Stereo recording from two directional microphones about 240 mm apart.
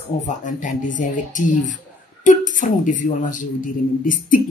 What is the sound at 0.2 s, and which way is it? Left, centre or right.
Speech, left.